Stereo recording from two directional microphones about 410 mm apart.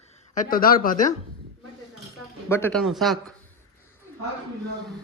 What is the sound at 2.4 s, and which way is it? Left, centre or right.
Speech, centre.